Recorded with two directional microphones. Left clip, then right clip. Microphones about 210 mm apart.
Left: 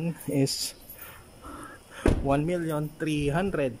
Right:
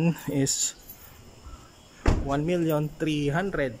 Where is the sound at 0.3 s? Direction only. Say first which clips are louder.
Left 3 dB; 5° left (ahead or behind).